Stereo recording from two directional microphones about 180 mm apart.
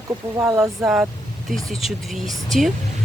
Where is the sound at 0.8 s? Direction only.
5° right (ahead or behind).